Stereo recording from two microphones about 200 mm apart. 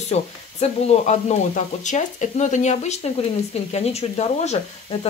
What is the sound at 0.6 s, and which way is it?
Speech, 30° left (ahead or behind).